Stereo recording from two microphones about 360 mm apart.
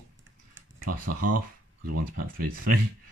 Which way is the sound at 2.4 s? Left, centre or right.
Right.